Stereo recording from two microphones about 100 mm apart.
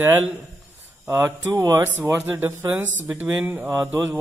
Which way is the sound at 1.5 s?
30° right (ahead or behind).